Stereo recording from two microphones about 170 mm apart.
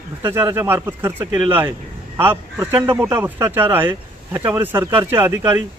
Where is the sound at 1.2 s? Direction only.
30° right (ahead or behind).